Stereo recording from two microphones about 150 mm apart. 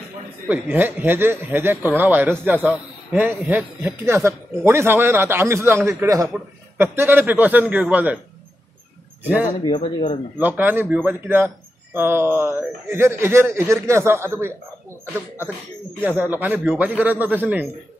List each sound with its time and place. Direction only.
0.5 s speech: 10° right (ahead or behind)
9.2 s speech: 10° right (ahead or behind)
9.6 s speech: 30° left (ahead or behind)
10.3 s speech: 10° right (ahead or behind)